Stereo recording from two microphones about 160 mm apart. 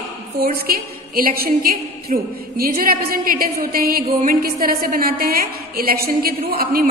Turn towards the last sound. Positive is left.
turn(degrees=-70)  # may be behind; listen again after turning